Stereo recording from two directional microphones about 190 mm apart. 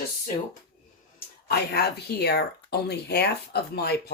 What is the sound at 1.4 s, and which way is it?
Speech, 55° left (ahead or behind).